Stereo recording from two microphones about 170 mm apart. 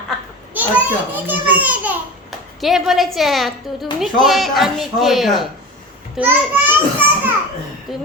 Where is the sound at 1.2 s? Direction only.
10° right (ahead or behind).